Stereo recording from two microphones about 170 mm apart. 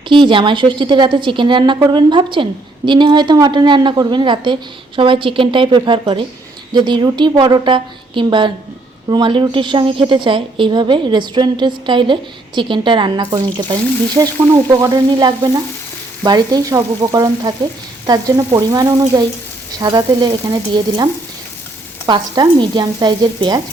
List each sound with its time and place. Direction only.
0.1 s speech: 30° right (ahead or behind)